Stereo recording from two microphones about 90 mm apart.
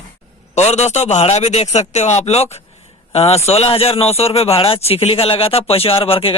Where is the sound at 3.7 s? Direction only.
90° left.